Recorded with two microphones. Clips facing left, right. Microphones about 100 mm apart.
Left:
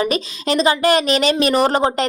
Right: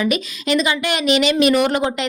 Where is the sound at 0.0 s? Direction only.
35° left (ahead or behind).